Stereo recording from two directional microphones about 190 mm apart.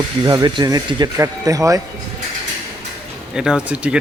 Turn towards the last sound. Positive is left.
turn(degrees=-5)  # may be behind; listen again after turning